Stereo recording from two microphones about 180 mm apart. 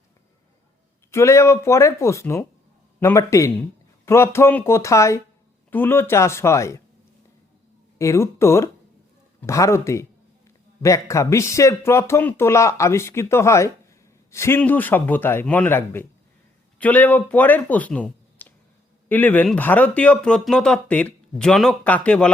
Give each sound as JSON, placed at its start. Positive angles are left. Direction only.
{"t": 1.1, "sound": "speech", "side_deg": 15}
{"t": 7.9, "sound": "speech", "side_deg": 15}